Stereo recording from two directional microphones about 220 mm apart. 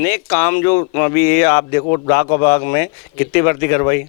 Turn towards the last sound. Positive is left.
turn(degrees=15)  # may be behind; listen again after turning